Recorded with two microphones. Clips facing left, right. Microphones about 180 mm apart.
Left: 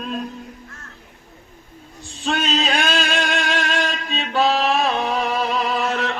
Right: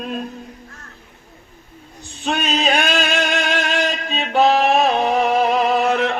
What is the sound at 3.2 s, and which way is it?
Music, 20° right (ahead or behind).